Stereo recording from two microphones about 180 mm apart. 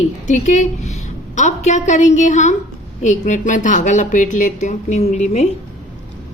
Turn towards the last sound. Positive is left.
turn(degrees=40)  # may be behind; listen again after turning